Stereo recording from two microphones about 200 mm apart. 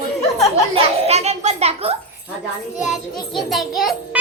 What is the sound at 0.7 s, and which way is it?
A child's voice, 30° right (ahead or behind).